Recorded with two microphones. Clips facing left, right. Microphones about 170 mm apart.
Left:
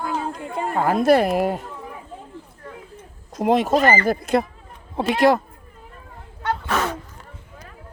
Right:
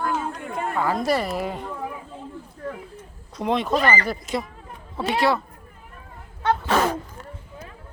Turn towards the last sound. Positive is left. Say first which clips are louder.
# right 3 dB
turn(degrees=-35)  # may be behind; listen again after turning